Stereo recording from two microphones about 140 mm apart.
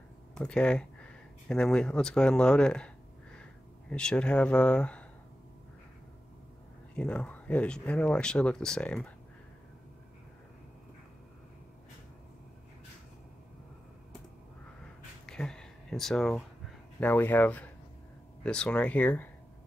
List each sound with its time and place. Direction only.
0.3 s speech: 5° left (ahead or behind)
3.9 s speech: 5° left (ahead or behind)
7.0 s speech: 10° left (ahead or behind)
15.2 s a sound: 5° left (ahead or behind)
18.4 s speech: 5° left (ahead or behind)